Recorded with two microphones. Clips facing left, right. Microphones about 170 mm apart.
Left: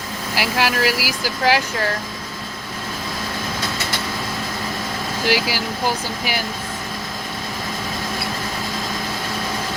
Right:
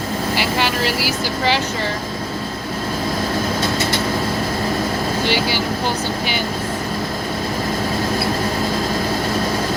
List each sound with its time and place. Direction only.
0.3 s speech: 5° left (ahead or behind)
5.2 s speech: 5° left (ahead or behind)